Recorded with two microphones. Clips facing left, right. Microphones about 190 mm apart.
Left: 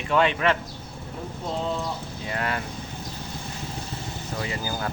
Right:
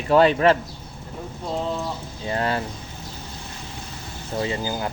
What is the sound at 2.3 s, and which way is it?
Speech, 30° right (ahead or behind).